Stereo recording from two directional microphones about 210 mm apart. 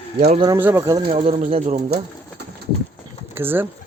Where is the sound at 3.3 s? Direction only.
10° right (ahead or behind).